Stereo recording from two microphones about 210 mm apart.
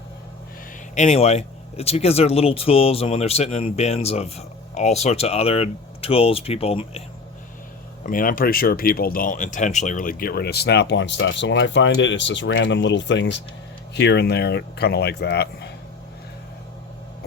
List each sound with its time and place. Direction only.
0.9 s speech: 30° left (ahead or behind)
8.0 s speech: 40° left (ahead or behind)